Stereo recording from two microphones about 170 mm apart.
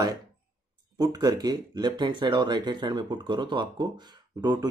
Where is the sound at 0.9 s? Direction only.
25° right (ahead or behind).